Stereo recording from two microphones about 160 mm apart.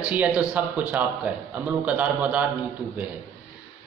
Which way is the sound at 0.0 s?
10° right (ahead or behind).